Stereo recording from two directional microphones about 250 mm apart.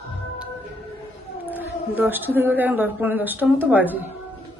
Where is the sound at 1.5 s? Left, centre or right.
Centre.